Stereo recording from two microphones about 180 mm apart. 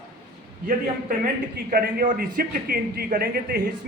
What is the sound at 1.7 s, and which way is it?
A man's voice, 50° right (ahead or behind).